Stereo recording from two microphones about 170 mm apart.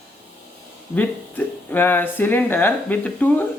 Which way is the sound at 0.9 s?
10° left (ahead or behind).